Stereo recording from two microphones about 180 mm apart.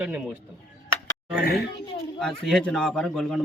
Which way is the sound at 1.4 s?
60° left (ahead or behind).